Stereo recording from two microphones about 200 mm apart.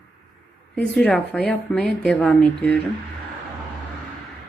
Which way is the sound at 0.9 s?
5° left (ahead or behind).